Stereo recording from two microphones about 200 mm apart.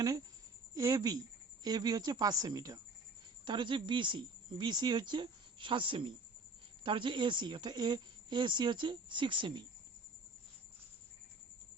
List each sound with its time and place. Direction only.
0.0 s speech: 20° right (ahead or behind)